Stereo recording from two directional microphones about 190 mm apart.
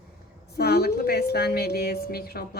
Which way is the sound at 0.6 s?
55° left (ahead or behind).